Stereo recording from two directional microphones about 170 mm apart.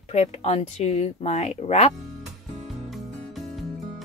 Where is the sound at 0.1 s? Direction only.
40° left (ahead or behind).